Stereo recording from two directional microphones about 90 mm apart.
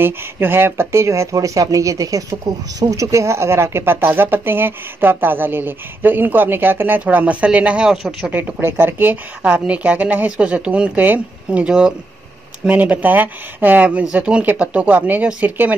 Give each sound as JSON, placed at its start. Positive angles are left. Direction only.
{"t": 0.0, "sound": "speech", "side_deg": -25}
{"t": 8.3, "sound": "a woman's voice", "side_deg": -20}